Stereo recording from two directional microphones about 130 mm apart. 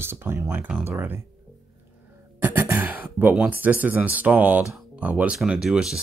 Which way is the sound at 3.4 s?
15° right (ahead or behind).